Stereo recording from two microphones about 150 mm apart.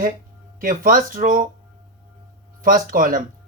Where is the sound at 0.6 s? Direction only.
65° right (ahead or behind).